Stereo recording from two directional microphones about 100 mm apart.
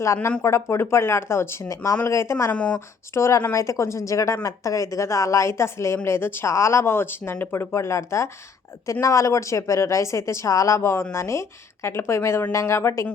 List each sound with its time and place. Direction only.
0.0 s speech: 25° left (ahead or behind)
2.5 s speech: 10° left (ahead or behind)
3.2 s a woman's voice: 30° left (ahead or behind)